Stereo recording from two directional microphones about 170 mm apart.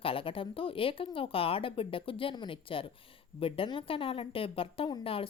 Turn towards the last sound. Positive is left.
turn(degrees=35)  # may be behind; listen again after turning